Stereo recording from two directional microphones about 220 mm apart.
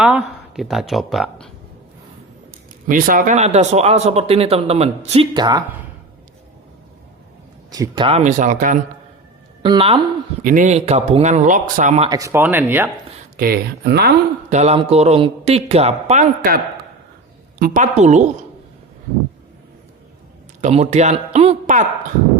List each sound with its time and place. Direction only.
0.0 s speech: 5° right (ahead or behind)
2.8 s speech: 40° right (ahead or behind); by 5.6 s 20° right (ahead or behind)
7.7 s speech: 20° right (ahead or behind); by 8.8 s 35° right (ahead or behind)
9.6 s speech: 25° right (ahead or behind)
10.4 s speech: 35° right (ahead or behind)
12.0 s speech: 15° right (ahead or behind)
13.3 s speech: 45° right (ahead or behind)
14.5 s speech: 30° right (ahead or behind)
17.6 s speech: 35° right (ahead or behind)
20.6 s speech: 30° right (ahead or behind)